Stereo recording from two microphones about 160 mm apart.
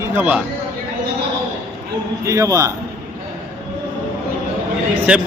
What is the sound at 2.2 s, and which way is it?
Speech, 20° right (ahead or behind).